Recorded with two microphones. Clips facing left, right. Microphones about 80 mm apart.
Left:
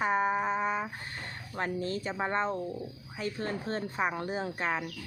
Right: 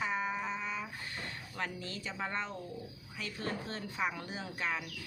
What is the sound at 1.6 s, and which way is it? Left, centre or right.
Speech, left.